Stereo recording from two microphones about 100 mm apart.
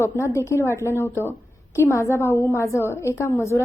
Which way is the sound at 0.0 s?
30° left (ahead or behind).